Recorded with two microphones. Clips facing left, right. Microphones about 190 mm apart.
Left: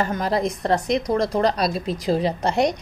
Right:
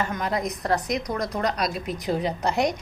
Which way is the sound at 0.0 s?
35° left (ahead or behind).